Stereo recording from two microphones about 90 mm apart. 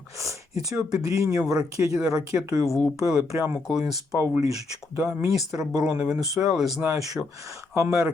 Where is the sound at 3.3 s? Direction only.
20° right (ahead or behind).